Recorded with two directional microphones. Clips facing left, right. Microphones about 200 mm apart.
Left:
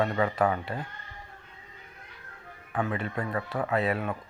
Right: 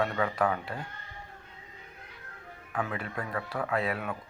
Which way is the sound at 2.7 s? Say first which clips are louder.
Left 4 dB; 5° left (ahead or behind).